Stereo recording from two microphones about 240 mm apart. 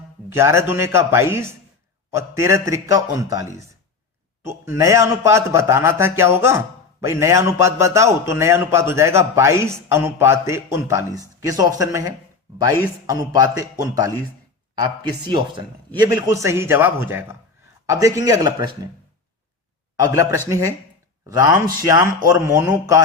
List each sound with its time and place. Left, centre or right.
0.3 s a man's voice: centre
4.4 s a man's voice: centre
13.3 s a man's voice: centre
20.5 s a man's voice: centre